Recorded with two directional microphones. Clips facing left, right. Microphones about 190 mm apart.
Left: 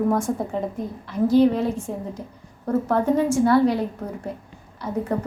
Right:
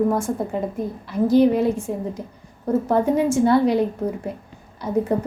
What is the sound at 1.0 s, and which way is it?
Speech, 15° right (ahead or behind).